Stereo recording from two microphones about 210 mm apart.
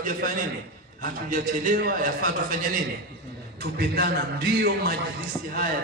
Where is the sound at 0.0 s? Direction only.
40° right (ahead or behind).